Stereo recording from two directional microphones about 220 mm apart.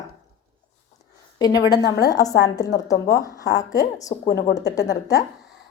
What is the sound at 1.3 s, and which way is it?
A woman's voice, 15° left (ahead or behind).